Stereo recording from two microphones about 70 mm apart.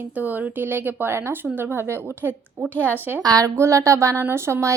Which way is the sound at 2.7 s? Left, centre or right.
Left.